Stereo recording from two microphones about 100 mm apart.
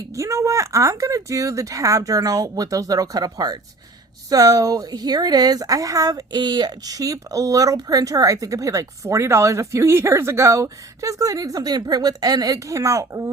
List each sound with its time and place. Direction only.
0.1 s a woman's voice: 30° right (ahead or behind)